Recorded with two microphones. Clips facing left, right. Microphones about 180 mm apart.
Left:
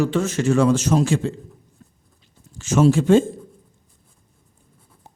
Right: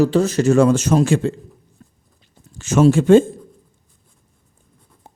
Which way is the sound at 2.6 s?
60° right (ahead or behind).